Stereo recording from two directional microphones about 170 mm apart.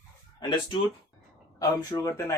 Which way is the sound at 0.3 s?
25° left (ahead or behind).